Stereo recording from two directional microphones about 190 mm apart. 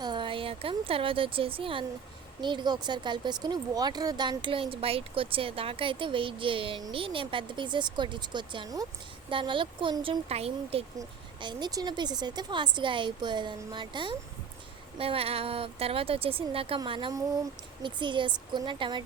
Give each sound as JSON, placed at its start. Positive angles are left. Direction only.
{"t": 0.0, "sound": "a woman's voice", "side_deg": -25}